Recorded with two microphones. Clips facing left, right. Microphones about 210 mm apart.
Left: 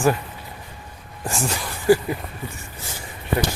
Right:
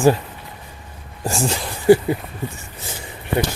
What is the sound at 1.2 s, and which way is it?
Speech, 30° right (ahead or behind).